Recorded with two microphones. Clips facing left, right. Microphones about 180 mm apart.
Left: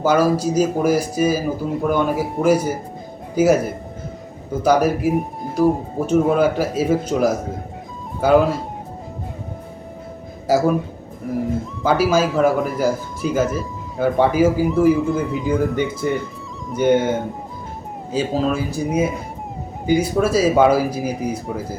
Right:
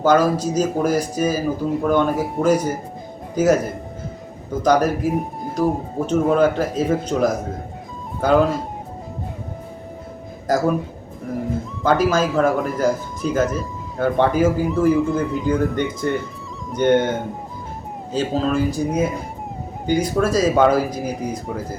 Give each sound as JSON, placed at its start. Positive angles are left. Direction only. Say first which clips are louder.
{"t": 0.0, "sound": "speech", "louder": "even", "side_deg": 10}
{"t": 4.6, "sound": "speech", "louder": "left 1 dB", "side_deg": 10}
{"t": 10.5, "sound": "speech", "louder": "left 2 dB", "side_deg": 10}